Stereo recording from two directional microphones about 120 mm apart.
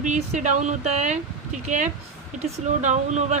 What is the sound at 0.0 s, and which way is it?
Speech, 85° right.